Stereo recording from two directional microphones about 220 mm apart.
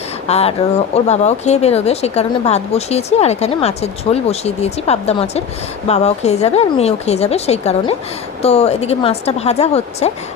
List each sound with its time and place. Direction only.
0.3 s speech: 30° left (ahead or behind)